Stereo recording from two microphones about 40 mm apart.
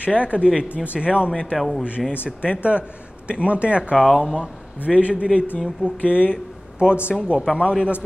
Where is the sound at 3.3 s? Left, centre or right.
Right.